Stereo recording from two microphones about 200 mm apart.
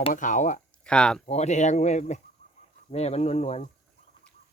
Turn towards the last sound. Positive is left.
turn(degrees=30)  # may be behind; listen again after turning